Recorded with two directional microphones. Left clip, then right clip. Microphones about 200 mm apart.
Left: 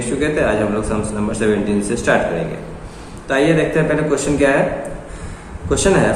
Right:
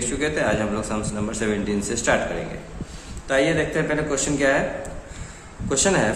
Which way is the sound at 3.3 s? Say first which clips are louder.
Left 5 dB; 35° right (ahead or behind).